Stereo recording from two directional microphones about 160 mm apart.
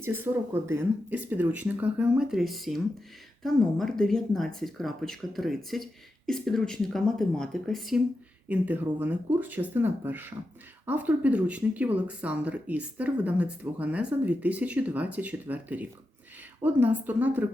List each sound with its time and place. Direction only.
0.0 s speech: 15° right (ahead or behind)